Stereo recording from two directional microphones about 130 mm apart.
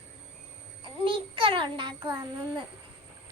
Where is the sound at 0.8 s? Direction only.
40° right (ahead or behind).